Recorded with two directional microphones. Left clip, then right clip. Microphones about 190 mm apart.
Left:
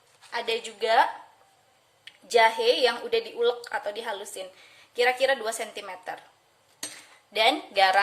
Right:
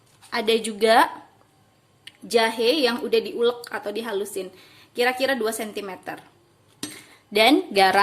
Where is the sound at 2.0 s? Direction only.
15° right (ahead or behind).